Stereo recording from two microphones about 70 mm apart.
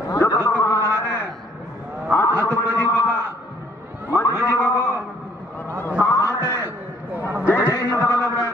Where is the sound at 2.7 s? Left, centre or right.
Left.